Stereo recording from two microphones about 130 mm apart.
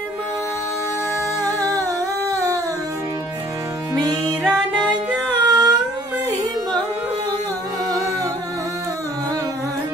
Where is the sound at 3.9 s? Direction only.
30° right (ahead or behind).